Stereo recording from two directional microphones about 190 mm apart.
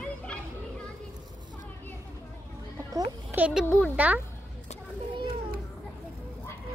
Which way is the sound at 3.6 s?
5° left (ahead or behind).